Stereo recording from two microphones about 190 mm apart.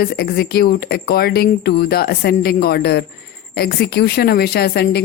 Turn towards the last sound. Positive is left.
turn(degrees=55)  # may be behind; listen again after turning